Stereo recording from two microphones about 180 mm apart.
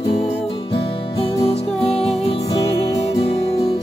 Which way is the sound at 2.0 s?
35° left (ahead or behind).